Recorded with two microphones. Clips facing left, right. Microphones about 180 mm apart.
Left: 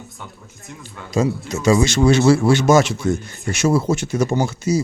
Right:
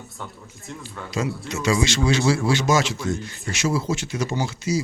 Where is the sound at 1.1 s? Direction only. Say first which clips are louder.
Left 7 dB; 45° left (ahead or behind).